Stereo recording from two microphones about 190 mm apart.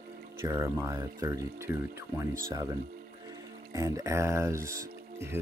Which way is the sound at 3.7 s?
15° right (ahead or behind).